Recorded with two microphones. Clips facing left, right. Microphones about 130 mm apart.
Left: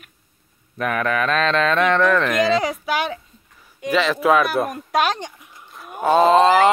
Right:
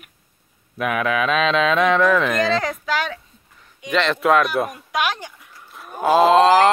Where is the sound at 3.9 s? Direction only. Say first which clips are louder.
Left 1 dB; 5° left (ahead or behind).